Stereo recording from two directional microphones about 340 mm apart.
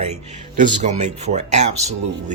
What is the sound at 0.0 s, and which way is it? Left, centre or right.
Speech, right.